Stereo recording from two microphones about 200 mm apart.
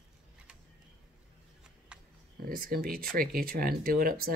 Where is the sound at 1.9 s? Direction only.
5° right (ahead or behind).